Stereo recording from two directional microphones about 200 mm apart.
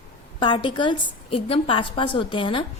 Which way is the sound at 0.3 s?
25° left (ahead or behind).